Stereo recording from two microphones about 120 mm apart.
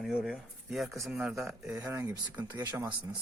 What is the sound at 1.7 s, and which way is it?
Speech, 20° right (ahead or behind).